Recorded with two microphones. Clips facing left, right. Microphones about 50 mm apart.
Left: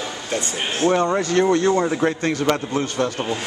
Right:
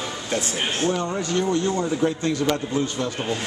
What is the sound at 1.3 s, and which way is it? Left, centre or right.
A man's voice, left.